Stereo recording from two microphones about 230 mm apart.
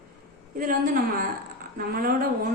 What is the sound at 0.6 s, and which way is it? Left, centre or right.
A woman's voice, right.